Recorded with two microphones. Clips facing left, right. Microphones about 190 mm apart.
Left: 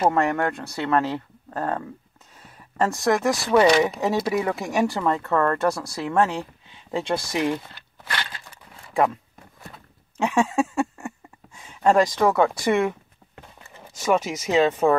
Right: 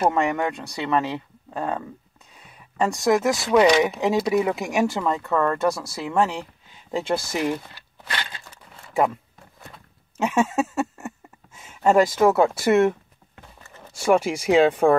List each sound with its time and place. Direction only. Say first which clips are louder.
0.1 s speech: left 1 dB; 5° right (ahead or behind)
2.8 s speech: right 1 dB; centre (ahead or behind)
8.1 s a sound: even; 15° right (ahead or behind)
10.1 s speech: even; 5° right (ahead or behind)
13.6 s a sound: even; 10° left (ahead or behind)
13.9 s speech: right 3 dB; 10° right (ahead or behind)